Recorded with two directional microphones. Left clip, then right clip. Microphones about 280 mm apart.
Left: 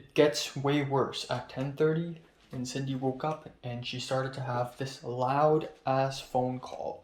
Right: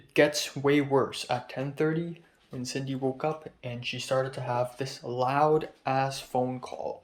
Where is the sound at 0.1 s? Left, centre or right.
Centre.